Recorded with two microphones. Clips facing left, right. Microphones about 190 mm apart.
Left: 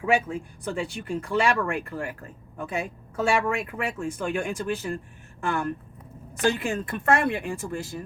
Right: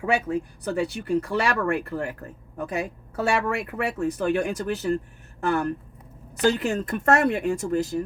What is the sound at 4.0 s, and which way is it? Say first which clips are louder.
Speech: right 6 dB; 40° right (ahead or behind).